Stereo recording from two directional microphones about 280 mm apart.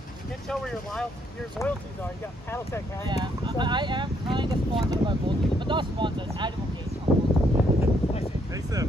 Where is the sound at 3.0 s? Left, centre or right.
Centre.